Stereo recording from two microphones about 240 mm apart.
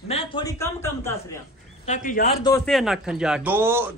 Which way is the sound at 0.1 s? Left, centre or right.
Left.